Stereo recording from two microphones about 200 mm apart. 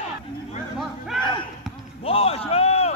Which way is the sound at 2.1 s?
30° left (ahead or behind).